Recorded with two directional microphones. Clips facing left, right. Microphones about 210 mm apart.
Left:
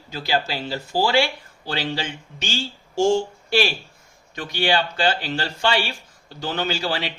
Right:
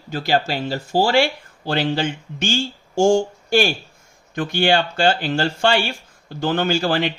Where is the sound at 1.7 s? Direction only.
55° right (ahead or behind).